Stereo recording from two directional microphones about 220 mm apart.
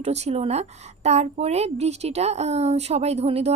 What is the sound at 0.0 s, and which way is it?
A woman's voice, 30° right (ahead or behind).